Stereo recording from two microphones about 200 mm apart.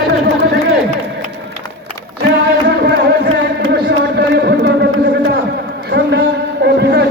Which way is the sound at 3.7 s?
55° right (ahead or behind).